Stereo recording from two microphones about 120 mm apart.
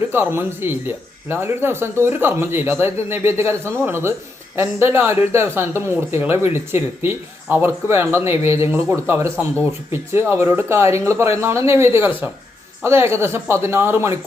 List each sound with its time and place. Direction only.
0.1 s speech: 20° right (ahead or behind)